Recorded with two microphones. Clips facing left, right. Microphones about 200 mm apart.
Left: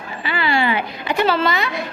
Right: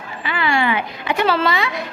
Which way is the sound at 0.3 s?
30° left (ahead or behind).